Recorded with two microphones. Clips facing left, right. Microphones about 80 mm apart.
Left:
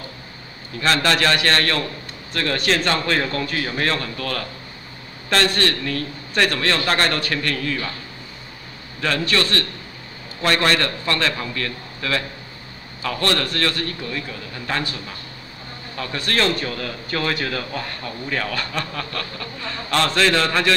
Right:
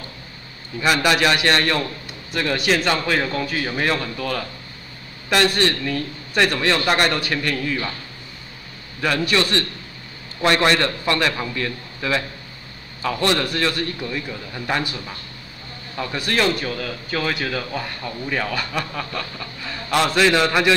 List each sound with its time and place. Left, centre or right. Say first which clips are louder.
0.7 s a man's voice: right 1 dB; centre
9.0 s a man's voice: right 1 dB; centre
16.0 s a man's voice: right 1 dB; centre